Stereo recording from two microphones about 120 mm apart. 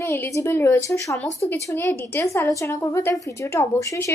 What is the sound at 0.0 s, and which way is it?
A woman's voice, 20° left (ahead or behind).